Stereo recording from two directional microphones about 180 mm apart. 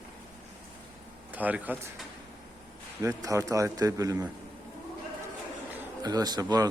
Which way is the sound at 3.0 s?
15° right (ahead or behind).